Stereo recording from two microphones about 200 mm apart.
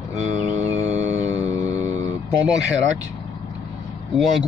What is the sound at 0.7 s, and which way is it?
Music, 35° right (ahead or behind).